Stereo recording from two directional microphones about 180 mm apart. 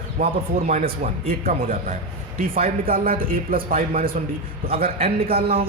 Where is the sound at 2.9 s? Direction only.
55° right (ahead or behind).